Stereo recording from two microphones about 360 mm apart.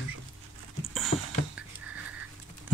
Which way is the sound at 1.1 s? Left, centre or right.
Centre.